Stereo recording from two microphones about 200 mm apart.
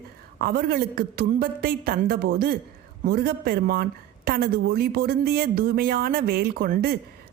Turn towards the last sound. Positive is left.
turn(degrees=-50)  # may be behind; listen again after turning